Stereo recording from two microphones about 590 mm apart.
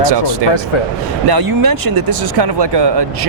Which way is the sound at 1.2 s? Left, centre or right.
Right.